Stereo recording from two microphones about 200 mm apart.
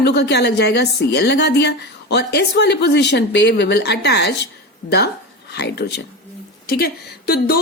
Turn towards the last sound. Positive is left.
turn(degrees=50)  # may be behind; listen again after turning